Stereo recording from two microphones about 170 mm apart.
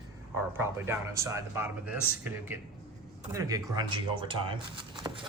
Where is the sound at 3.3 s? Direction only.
20° right (ahead or behind).